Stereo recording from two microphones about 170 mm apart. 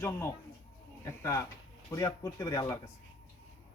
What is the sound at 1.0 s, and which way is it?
Speech, 15° left (ahead or behind).